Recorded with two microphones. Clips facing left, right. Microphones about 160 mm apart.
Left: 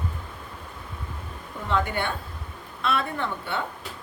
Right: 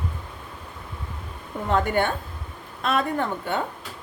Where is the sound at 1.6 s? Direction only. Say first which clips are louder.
Right 4 dB; 45° right (ahead or behind).